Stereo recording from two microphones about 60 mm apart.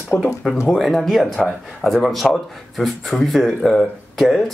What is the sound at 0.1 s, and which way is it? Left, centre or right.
Speech, left.